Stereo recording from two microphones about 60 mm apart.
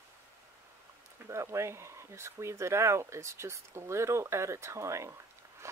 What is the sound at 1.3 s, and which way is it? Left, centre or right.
Speech, right.